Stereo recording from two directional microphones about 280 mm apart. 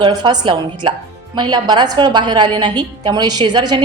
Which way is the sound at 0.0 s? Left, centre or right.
Centre.